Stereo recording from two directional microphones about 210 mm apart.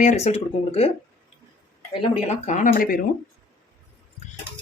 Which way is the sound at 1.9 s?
30° left (ahead or behind).